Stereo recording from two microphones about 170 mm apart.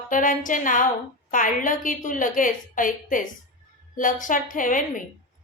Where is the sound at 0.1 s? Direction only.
50° left (ahead or behind).